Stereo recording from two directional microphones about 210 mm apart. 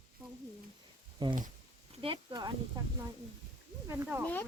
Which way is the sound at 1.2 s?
20° right (ahead or behind).